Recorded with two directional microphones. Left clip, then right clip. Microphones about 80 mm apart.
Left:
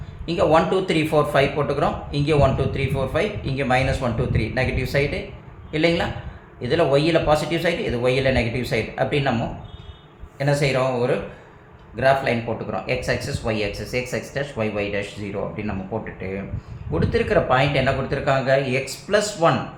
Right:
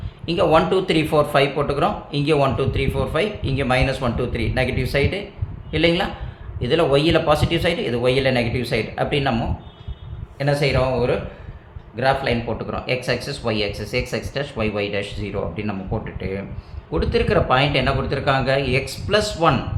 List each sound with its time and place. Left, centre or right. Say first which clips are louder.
0.3 s speech: right 1 dB; right
10.3 s speech: right 1 dB; right